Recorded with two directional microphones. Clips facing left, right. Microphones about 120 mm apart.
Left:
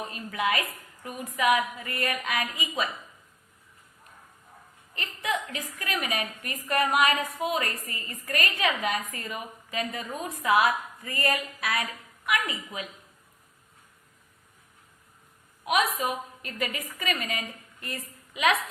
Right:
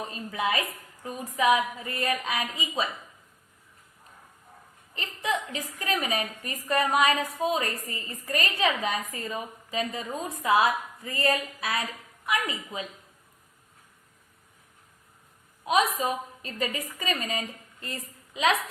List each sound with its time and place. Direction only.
0.1 s a woman's voice: 30° right (ahead or behind)
4.9 s a woman's voice: 30° right (ahead or behind)
15.6 s a woman's voice: 30° right (ahead or behind)